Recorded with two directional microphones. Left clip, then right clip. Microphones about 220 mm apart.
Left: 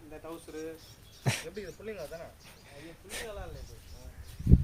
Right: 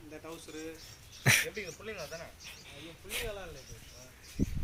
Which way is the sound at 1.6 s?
45° left (ahead or behind).